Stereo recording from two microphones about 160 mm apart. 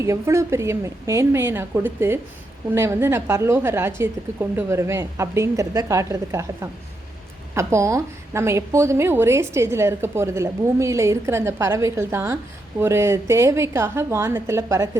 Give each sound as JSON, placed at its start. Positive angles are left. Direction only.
{"t": 0.0, "sound": "a woman's voice", "side_deg": -20}